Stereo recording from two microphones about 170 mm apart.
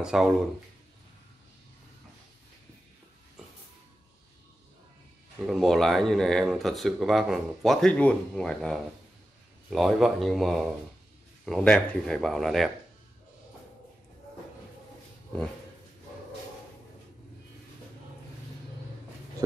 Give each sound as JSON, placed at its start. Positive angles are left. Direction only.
{"t": 0.0, "sound": "speech", "side_deg": -5}
{"t": 5.5, "sound": "speech", "side_deg": 0}